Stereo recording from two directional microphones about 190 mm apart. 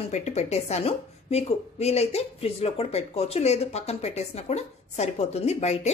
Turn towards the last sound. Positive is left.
turn(degrees=35)  # may be behind; listen again after turning